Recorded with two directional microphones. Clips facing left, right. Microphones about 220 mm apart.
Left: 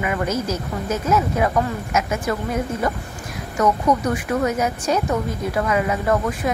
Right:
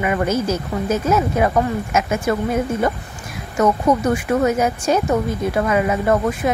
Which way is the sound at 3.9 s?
25° right (ahead or behind).